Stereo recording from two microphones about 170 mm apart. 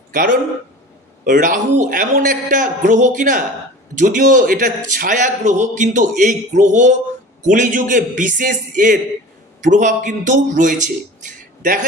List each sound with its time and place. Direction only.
0.1 s a man's voice: 50° right (ahead or behind)